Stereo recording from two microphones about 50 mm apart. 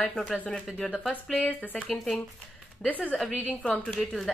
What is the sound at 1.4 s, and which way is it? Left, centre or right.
Speech, left.